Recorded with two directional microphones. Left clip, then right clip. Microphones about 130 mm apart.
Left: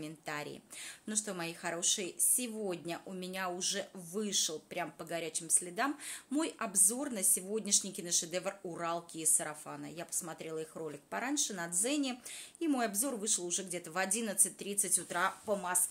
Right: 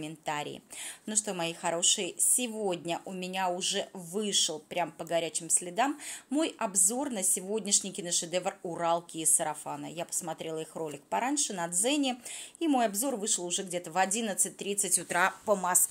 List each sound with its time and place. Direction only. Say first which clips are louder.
0.0 s a woman's voice: right 6 dB; 30° right (ahead or behind)
15.0 s speech: right 7 dB; 75° right (ahead or behind); by 15.8 s 50° right (ahead or behind)